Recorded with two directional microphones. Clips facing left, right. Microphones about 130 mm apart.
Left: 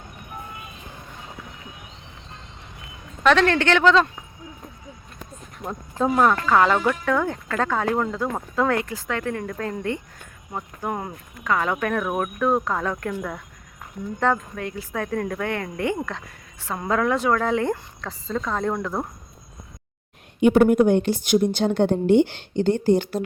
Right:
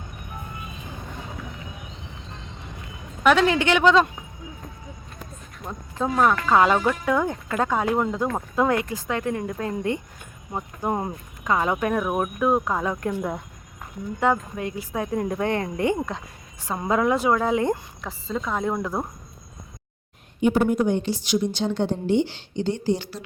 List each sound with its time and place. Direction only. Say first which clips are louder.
3.2 s speech: even; 10° right (ahead or behind)
6.0 s speech: left 2 dB; centre (ahead or behind)
6.4 s speech: even; 15° right (ahead or behind)
20.4 s a woman's voice: left 5 dB; 60° left (ahead or behind)